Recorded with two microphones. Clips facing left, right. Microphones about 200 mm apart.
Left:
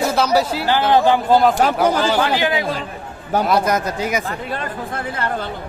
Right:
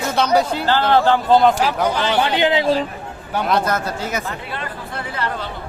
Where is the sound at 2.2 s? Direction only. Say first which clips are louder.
Right 2 dB; 20° right (ahead or behind).